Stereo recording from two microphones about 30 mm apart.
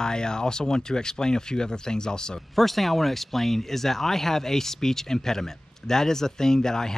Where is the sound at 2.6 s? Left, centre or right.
Centre.